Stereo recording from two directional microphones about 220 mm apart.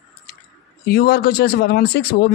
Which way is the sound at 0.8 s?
45° left (ahead or behind).